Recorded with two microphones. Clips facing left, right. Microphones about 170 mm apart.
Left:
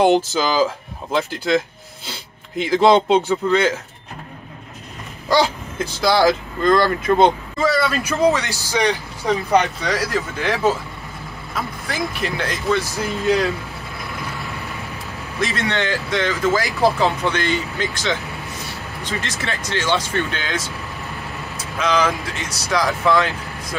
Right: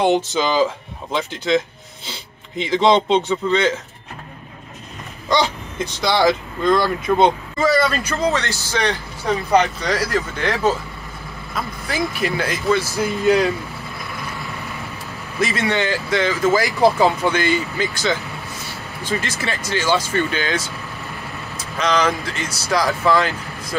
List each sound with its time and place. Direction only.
0.0 s speech: centre (ahead or behind)
5.3 s speech: 5° left (ahead or behind)
8.3 s speech: 15° left (ahead or behind)
9.5 s speech: centre (ahead or behind)
11.9 s speech: 5° right (ahead or behind)
13.0 s speech: 15° right (ahead or behind)
15.4 s speech: 5° right (ahead or behind)
21.7 s speech: 5° left (ahead or behind)